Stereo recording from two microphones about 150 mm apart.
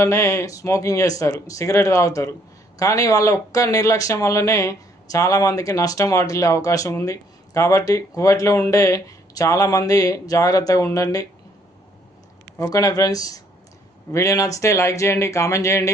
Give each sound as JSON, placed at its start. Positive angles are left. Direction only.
{"t": 0.0, "sound": "speech", "side_deg": 20}
{"t": 12.5, "sound": "speech", "side_deg": 20}